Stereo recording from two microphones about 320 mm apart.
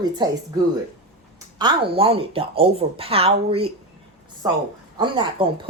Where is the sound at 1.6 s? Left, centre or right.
Centre.